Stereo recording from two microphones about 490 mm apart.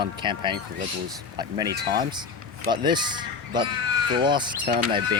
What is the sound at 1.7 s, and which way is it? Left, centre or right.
Speech, centre.